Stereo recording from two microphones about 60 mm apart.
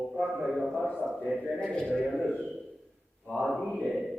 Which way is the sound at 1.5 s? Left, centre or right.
Centre.